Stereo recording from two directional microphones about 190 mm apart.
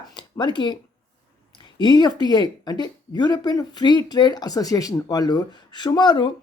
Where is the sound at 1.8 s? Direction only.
20° left (ahead or behind).